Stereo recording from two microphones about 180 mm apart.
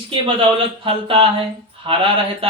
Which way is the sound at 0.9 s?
30° right (ahead or behind).